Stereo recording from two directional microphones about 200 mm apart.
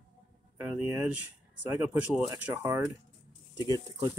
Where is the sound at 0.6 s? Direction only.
10° right (ahead or behind).